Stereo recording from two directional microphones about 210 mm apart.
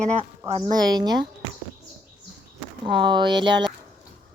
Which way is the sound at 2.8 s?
25° right (ahead or behind).